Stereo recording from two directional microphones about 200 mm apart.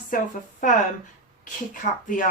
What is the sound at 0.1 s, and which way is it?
Speech, 45° left (ahead or behind).